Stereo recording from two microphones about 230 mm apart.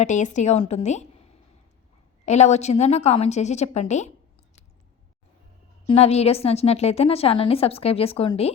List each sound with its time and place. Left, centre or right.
0.0 s a woman's voice: left
2.2 s a woman's voice: left
5.9 s a woman's voice: left